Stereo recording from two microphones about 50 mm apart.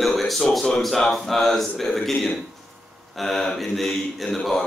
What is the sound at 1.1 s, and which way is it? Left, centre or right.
Speech, centre.